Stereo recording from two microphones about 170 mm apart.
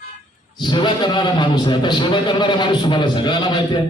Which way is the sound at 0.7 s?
30° left (ahead or behind).